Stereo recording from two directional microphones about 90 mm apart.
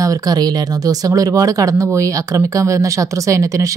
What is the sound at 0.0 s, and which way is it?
Speech, 45° right (ahead or behind).